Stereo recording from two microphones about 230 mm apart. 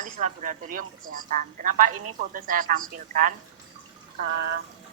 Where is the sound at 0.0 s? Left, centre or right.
Right.